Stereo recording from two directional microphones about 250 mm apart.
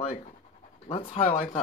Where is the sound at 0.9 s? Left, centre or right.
Left.